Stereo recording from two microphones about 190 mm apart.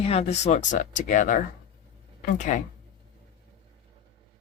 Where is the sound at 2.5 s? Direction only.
35° left (ahead or behind).